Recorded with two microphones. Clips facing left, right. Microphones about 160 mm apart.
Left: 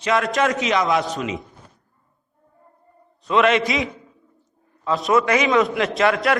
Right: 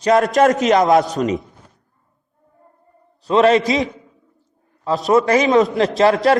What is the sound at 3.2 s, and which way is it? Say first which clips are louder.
Speech: right 4 dB; 35° right (ahead or behind).